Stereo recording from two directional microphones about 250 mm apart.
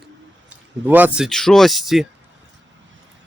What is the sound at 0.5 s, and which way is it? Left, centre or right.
Speech, centre.